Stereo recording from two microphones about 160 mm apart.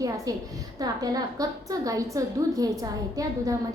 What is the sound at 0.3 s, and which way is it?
A woman's voice, 20° right (ahead or behind).